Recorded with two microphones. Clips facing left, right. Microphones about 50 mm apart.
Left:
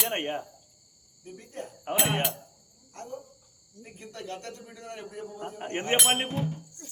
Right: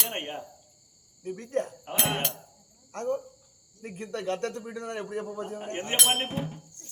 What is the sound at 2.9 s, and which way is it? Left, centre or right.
A man's voice, right.